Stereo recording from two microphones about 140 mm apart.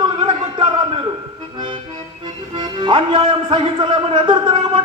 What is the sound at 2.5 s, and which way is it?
Speech, 35° right (ahead or behind).